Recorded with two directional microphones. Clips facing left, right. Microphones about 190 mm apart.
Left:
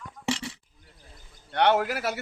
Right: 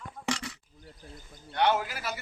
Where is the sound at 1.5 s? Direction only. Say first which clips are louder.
Left 4 dB; 65° left (ahead or behind).